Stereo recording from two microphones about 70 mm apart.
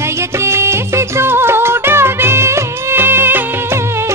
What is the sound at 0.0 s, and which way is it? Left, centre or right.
Music, right.